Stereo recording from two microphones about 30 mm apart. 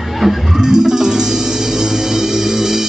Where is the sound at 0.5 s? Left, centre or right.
Right.